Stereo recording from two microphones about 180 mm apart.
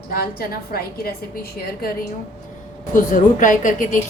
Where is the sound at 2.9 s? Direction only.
45° left (ahead or behind).